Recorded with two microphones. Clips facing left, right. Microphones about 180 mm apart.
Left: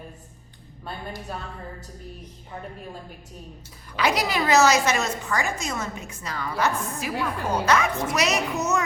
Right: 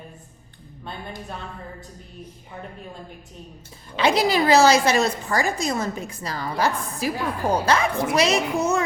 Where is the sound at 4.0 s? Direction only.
30° right (ahead or behind).